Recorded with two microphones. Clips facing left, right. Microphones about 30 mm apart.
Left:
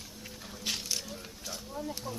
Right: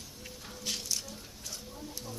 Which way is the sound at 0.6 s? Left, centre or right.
Left.